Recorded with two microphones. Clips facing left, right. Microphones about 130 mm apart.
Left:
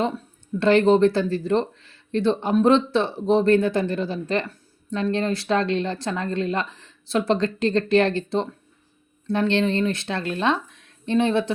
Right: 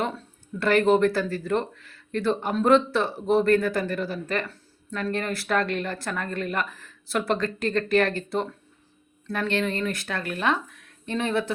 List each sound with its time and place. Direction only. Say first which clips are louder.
0.6 s speech: left 3 dB; 25° left (ahead or behind)